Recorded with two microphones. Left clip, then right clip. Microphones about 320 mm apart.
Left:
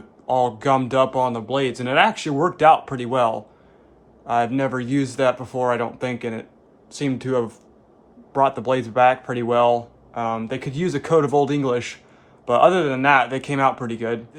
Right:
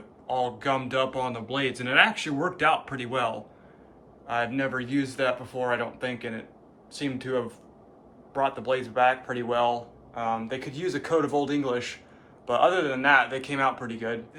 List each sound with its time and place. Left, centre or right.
0.3 s speech: centre